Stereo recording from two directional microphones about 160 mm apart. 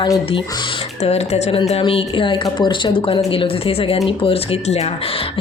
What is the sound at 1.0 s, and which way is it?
Speech, 40° left (ahead or behind).